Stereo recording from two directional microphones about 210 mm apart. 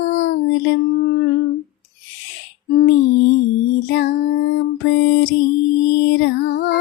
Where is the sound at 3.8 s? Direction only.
50° left (ahead or behind).